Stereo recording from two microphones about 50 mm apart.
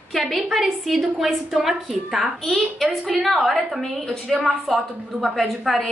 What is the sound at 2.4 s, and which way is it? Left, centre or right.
A woman's voice, centre.